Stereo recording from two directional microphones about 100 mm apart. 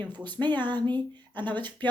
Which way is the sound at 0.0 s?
45° right (ahead or behind).